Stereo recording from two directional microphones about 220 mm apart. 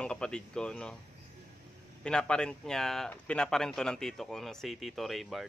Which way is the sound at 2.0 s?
5° left (ahead or behind).